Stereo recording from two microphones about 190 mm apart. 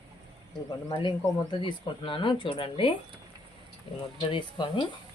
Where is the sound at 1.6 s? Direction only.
25° left (ahead or behind).